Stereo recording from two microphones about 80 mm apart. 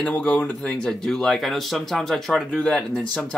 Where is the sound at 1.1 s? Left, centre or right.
Centre.